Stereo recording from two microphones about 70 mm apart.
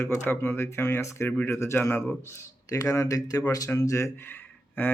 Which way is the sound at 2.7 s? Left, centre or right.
Left.